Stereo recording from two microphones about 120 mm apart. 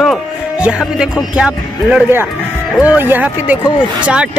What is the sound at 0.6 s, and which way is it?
Speech, 10° right (ahead or behind).